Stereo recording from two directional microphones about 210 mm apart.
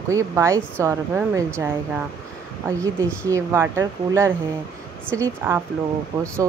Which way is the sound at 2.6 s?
15° right (ahead or behind).